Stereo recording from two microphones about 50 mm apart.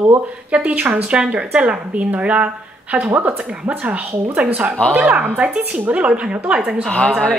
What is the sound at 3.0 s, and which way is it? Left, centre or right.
A woman's voice, right.